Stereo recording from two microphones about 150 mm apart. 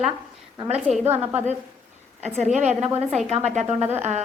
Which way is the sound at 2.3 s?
50° right (ahead or behind).